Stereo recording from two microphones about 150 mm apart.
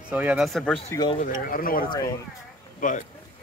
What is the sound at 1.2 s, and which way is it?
Speech, 70° left (ahead or behind).